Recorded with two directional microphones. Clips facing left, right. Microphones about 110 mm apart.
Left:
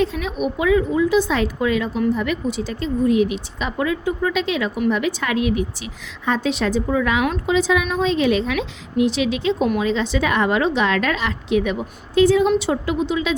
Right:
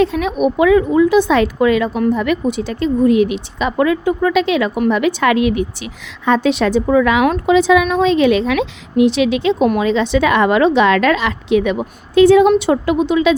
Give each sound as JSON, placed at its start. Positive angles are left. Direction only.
{"t": 0.0, "sound": "a woman's voice", "side_deg": -65}
{"t": 7.3, "sound": "a woman's voice", "side_deg": -70}